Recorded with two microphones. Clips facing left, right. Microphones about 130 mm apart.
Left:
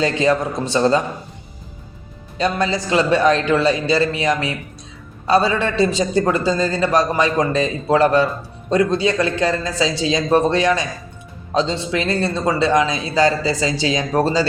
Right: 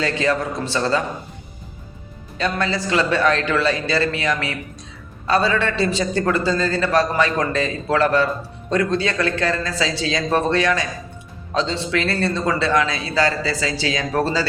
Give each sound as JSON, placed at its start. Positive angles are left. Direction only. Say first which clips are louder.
{"t": 0.0, "sound": "a man's voice", "louder": "left 3 dB", "side_deg": 20}
{"t": 2.4, "sound": "a man's voice", "louder": "left 3 dB", "side_deg": 15}